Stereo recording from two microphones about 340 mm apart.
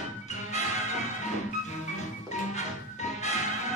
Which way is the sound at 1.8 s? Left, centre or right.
Centre.